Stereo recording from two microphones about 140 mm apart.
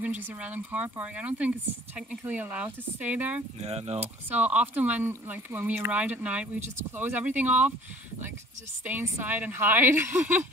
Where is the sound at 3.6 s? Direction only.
50° right (ahead or behind).